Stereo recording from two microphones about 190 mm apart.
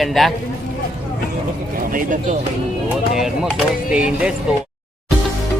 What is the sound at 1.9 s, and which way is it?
Speech, 45° right (ahead or behind).